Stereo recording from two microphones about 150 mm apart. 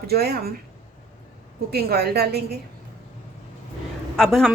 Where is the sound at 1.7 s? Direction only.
90° right.